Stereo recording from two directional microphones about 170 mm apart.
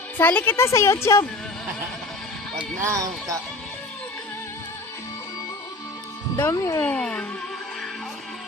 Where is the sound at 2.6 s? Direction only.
15° right (ahead or behind).